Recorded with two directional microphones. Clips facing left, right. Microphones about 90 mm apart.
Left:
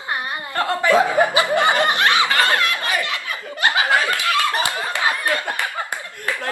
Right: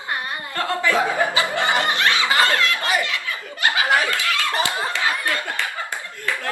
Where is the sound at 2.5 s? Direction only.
20° left (ahead or behind).